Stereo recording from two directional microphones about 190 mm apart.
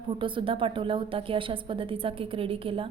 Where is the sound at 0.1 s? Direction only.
25° right (ahead or behind).